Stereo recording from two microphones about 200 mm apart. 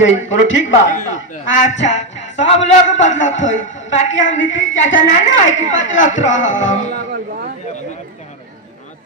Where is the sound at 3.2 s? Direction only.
70° left (ahead or behind).